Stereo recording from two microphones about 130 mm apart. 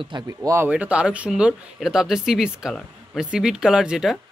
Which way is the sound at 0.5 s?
15° right (ahead or behind).